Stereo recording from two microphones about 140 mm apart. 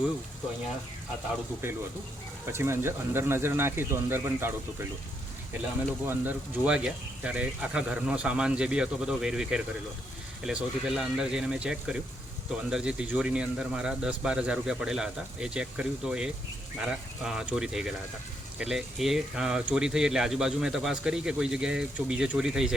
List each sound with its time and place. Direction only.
2.5 s speech: 20° right (ahead or behind)
6.1 s speech: 10° right (ahead or behind)